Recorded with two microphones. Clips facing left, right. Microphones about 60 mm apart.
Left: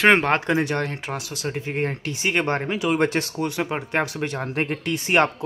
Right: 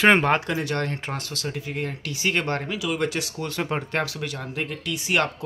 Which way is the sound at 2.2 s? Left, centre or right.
Left.